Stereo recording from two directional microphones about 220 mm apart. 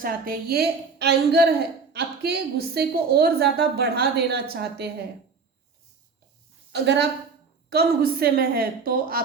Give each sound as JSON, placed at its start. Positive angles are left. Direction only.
{"t": 0.0, "sound": "a woman's voice", "side_deg": -40}
{"t": 6.7, "sound": "a woman's voice", "side_deg": -50}